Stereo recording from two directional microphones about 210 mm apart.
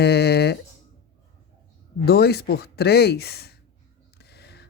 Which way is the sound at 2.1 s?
50° left (ahead or behind).